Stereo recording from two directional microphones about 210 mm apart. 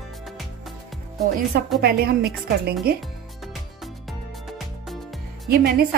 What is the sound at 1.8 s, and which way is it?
A woman's voice, 50° right (ahead or behind).